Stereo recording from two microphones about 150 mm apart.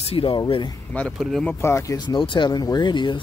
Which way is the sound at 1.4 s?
15° left (ahead or behind).